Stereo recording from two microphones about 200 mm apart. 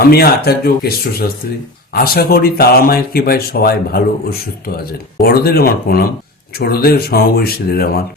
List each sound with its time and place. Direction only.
0.1 s speech: 50° left (ahead or behind)